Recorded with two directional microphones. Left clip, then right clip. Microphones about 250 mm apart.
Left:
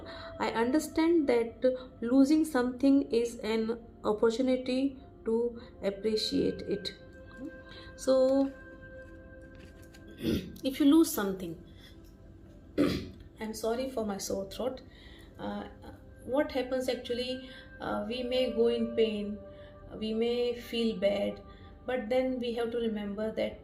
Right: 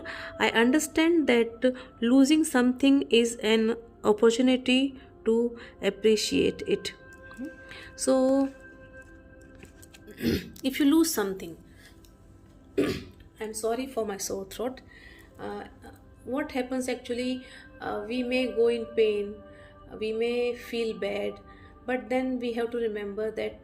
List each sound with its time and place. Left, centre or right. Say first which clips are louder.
0.0 s a woman's voice: right 7 dB; right
7.7 s music: right 2 dB; right
10.2 s a woman's voice: right 4 dB; right
13.5 s a woman's voice: right 2 dB; right